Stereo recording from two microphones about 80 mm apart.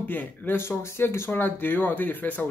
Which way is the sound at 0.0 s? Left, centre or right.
Left.